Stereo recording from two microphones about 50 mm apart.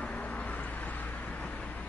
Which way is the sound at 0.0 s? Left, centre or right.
Left.